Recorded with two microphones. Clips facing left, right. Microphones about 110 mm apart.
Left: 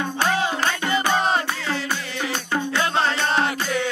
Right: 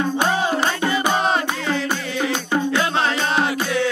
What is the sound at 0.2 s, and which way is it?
Music, 20° right (ahead or behind).